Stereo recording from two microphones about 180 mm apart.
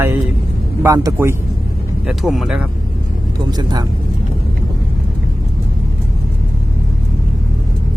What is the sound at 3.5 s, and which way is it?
Speech, 20° right (ahead or behind).